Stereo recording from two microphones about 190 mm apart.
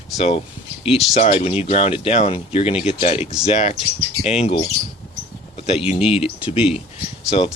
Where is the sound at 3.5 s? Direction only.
35° left (ahead or behind).